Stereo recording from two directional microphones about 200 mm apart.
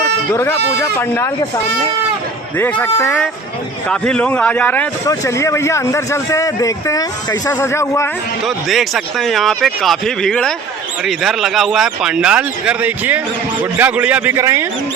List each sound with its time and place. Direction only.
0.9 s speech: 10° left (ahead or behind)
2.6 s speech: 10° left (ahead or behind)
8.4 s speech: centre (ahead or behind)